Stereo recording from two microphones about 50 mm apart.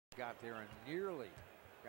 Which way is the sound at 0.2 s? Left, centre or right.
Centre.